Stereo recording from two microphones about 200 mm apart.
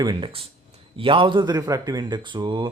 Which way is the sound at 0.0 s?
20° right (ahead or behind).